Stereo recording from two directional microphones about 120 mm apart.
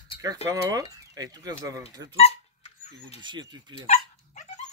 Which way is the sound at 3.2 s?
40° right (ahead or behind).